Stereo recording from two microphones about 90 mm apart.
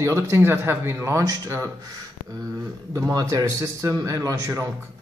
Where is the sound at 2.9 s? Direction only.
35° right (ahead or behind).